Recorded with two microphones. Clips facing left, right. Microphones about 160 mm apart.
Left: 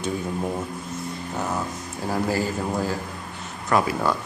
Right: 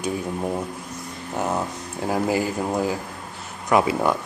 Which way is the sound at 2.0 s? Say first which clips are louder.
Right 2 dB; 15° right (ahead or behind).